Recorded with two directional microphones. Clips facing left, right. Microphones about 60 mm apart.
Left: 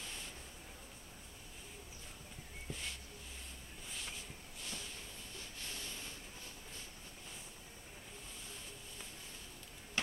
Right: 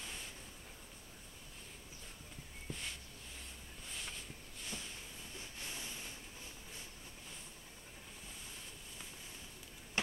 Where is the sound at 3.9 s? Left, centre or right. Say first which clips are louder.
Even; centre.